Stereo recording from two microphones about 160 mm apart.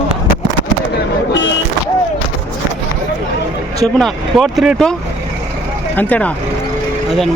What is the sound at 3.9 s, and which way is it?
Speech, centre (ahead or behind).